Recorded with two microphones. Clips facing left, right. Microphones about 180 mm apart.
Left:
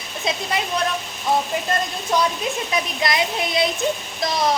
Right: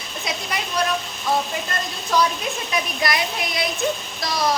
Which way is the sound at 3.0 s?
25° left (ahead or behind).